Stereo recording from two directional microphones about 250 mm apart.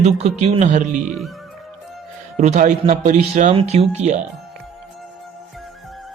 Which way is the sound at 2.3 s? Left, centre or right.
Right.